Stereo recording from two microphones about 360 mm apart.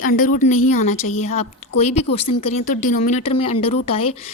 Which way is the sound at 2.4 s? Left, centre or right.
Centre.